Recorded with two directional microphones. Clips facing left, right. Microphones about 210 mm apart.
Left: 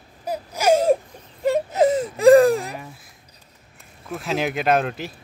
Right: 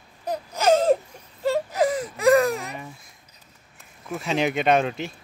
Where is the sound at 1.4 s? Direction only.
20° left (ahead or behind).